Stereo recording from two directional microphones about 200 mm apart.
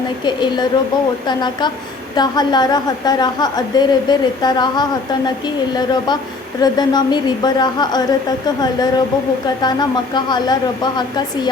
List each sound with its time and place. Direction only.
1.3 s a woman's voice: 20° left (ahead or behind)
10.2 s a woman's voice: 20° left (ahead or behind)